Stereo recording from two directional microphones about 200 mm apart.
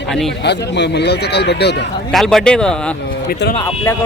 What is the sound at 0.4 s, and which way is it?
Speech, 60° left (ahead or behind).